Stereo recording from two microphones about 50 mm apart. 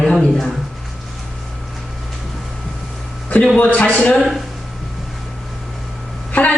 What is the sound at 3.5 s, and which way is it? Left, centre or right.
Speech, left.